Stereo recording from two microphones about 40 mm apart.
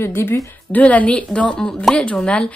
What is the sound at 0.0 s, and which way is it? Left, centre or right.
Speech, left.